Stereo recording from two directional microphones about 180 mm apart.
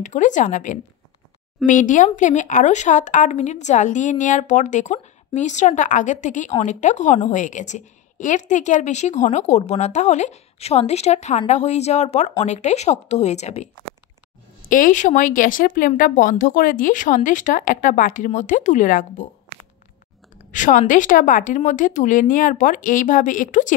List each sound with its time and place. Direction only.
0.0 s a woman's voice: 45° left (ahead or behind)
14.7 s speech: 45° left (ahead or behind)
20.5 s speech: 45° left (ahead or behind)